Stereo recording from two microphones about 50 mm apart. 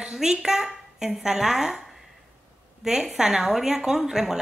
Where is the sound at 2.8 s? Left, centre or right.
Centre.